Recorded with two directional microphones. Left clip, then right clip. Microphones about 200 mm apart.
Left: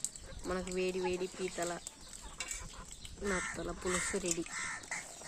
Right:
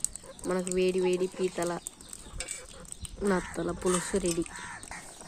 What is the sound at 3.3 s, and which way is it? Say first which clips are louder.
Speech: right 7 dB; 30° right (ahead or behind).